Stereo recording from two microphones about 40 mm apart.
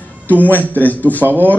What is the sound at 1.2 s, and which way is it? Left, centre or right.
Speech, right.